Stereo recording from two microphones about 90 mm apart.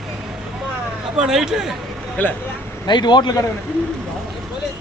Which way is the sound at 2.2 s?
20° left (ahead or behind).